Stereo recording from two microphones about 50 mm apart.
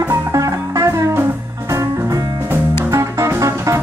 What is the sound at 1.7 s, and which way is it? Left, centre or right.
Music, right.